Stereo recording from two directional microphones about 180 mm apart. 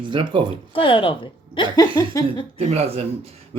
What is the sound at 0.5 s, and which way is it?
Speech, 30° left (ahead or behind).